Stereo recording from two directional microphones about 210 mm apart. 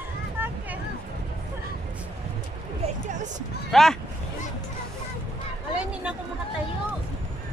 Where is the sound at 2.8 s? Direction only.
35° right (ahead or behind).